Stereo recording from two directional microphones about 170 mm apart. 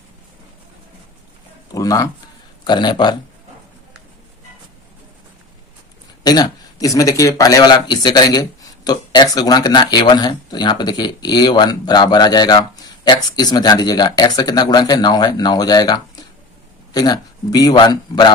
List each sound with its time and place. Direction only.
1.7 s speech: 20° left (ahead or behind)
6.2 s speech: 25° left (ahead or behind)